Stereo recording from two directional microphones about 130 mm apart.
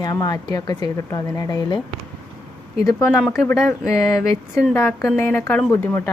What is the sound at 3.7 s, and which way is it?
A woman's voice, 20° left (ahead or behind).